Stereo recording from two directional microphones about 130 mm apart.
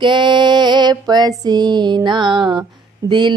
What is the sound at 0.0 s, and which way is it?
Female singing, 35° right (ahead or behind).